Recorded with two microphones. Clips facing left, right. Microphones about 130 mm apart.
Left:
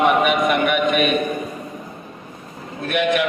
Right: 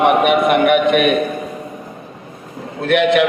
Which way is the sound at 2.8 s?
70° right (ahead or behind).